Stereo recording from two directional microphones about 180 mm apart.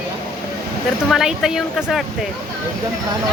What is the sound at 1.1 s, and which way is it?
Speech, 5° right (ahead or behind).